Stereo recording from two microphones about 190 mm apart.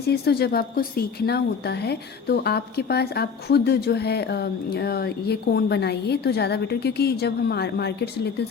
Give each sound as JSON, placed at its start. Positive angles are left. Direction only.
{"t": 0.1, "sound": "speech", "side_deg": 55}